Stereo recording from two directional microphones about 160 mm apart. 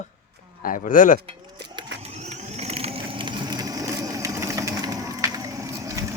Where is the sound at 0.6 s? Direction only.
60° left (ahead or behind).